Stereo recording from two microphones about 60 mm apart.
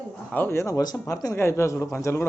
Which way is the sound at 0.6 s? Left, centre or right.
Left.